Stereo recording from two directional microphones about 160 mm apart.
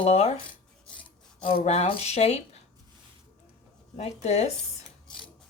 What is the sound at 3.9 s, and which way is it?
Speech, 40° left (ahead or behind).